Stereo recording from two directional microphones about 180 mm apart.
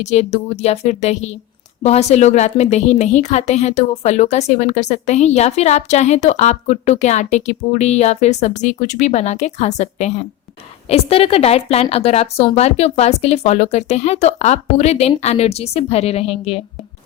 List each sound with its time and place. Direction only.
0.0 s a woman's voice: 40° left (ahead or behind)